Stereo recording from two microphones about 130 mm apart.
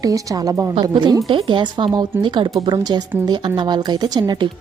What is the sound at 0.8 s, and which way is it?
A woman's voice, 40° right (ahead or behind).